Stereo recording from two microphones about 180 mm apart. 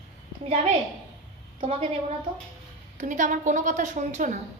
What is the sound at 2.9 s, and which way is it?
A woman's voice, 45° right (ahead or behind).